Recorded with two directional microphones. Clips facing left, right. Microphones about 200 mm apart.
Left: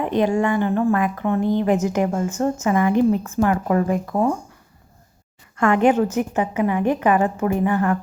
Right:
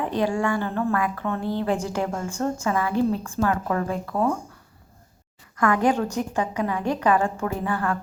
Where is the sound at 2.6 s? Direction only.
20° left (ahead or behind).